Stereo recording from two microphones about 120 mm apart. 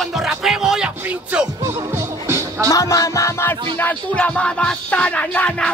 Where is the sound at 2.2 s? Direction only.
25° right (ahead or behind).